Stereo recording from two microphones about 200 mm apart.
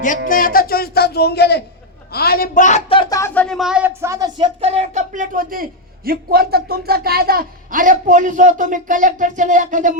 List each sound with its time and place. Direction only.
0.3 s speech: 45° left (ahead or behind); by 4.3 s 15° right (ahead or behind)
4.4 s speech: 25° right (ahead or behind)